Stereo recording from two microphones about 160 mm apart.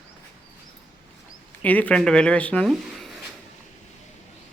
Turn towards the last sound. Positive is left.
turn(degrees=0)  # may be behind; listen again after turning